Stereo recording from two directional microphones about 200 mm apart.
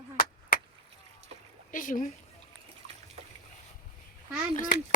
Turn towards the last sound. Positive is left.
turn(degrees=40)  # may be behind; listen again after turning